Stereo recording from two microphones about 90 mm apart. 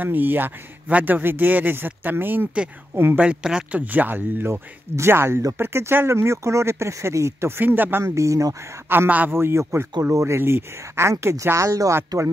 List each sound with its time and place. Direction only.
0.0 s speech: 20° right (ahead or behind)
3.2 s speech: 10° right (ahead or behind)
8.0 s speech: 35° right (ahead or behind)
8.8 s speech: 25° right (ahead or behind)